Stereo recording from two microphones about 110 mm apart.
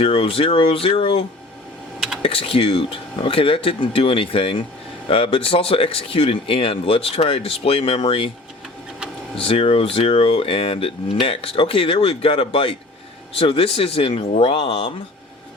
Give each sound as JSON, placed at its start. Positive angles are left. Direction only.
{"t": 0.0, "sound": "speech", "side_deg": 60}
{"t": 2.2, "sound": "speech", "side_deg": 55}
{"t": 9.3, "sound": "speech", "side_deg": 60}